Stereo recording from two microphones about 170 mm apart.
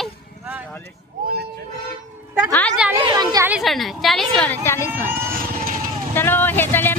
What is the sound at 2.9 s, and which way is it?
Speech, 25° right (ahead or behind).